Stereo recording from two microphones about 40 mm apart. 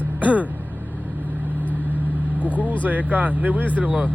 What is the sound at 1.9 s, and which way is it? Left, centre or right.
Vehicle, right.